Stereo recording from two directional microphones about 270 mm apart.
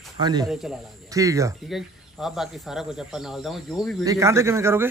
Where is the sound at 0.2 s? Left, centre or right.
Centre.